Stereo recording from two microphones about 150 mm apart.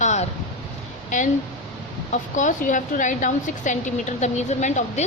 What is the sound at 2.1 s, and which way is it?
A woman's voice, 55° left (ahead or behind).